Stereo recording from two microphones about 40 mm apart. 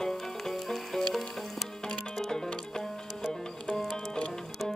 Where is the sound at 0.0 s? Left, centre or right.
Centre.